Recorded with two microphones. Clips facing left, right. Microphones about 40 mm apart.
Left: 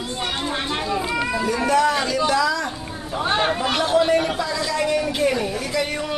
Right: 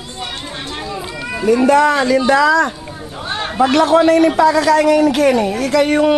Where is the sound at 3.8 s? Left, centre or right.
Right.